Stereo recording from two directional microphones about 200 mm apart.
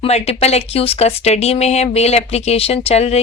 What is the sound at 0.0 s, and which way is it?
Speech, 30° left (ahead or behind).